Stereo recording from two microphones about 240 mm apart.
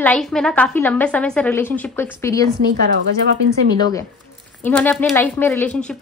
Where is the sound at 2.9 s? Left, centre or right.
Right.